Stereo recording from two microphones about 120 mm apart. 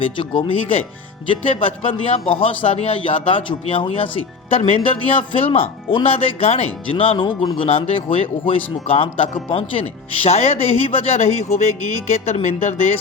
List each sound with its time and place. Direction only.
0.0 s speech: 45° left (ahead or behind); by 12.7 s 60° left (ahead or behind)